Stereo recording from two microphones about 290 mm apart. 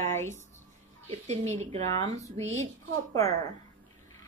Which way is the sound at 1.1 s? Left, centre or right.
Right.